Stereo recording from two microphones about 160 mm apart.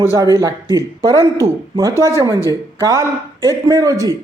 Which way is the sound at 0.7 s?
20° right (ahead or behind).